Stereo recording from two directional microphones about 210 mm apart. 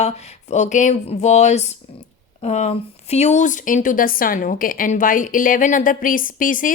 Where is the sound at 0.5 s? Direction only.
35° left (ahead or behind).